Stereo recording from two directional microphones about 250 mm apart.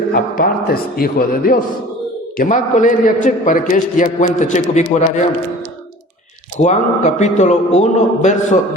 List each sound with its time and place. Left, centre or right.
0.1 s a man's voice: left
6.6 s a man's voice: left